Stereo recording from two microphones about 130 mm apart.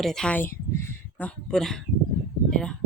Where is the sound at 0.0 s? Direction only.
5° left (ahead or behind).